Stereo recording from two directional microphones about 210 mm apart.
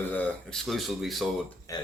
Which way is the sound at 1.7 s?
15° left (ahead or behind).